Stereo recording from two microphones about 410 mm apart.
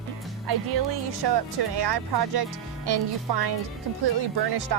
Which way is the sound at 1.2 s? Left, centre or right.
Right.